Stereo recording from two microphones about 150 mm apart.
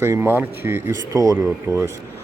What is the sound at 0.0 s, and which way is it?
Speech, 15° right (ahead or behind).